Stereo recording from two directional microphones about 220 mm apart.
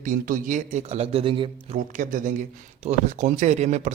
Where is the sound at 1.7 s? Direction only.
35° right (ahead or behind).